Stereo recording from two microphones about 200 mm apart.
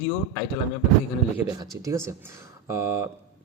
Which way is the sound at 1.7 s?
15° right (ahead or behind).